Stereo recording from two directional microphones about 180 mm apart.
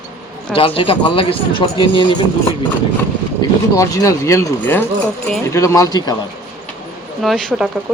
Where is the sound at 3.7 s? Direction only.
20° left (ahead or behind).